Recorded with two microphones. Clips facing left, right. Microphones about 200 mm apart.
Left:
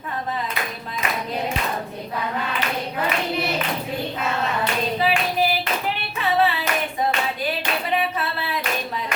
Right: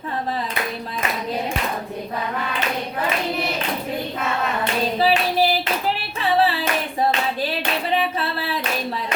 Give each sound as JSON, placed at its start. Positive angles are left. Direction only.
{"t": 4.9, "sound": "clapping", "side_deg": -35}
{"t": 8.2, "sound": "clapping", "side_deg": -30}